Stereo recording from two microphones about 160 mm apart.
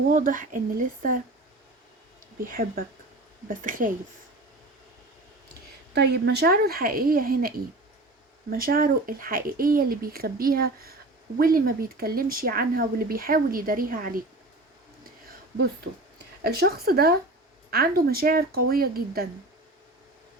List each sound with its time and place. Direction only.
0.1 s speech: 55° right (ahead or behind)
2.4 s speech: 60° right (ahead or behind)
5.9 s a woman's voice: 90° right; by 14.3 s 65° right (ahead or behind)
16.4 s a woman's voice: 80° right